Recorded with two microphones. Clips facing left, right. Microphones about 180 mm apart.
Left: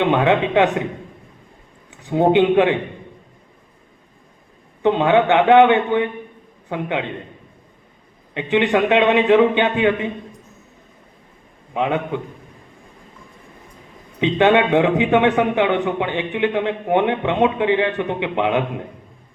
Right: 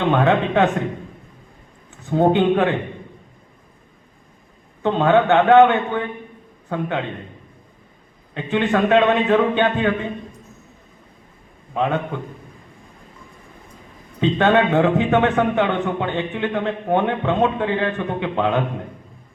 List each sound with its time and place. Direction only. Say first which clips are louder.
0.0 s a man's voice: left 1 dB; 15° left (ahead or behind)
1.9 s a man's voice: left 1 dB; 15° left (ahead or behind)
4.8 s a man's voice: left 1 dB; 15° left (ahead or behind)
8.3 s a man's voice: left 2 dB; 15° left (ahead or behind)
11.7 s a man's voice: even; 15° left (ahead or behind)
14.2 s a man's voice: left 1 dB; 15° left (ahead or behind)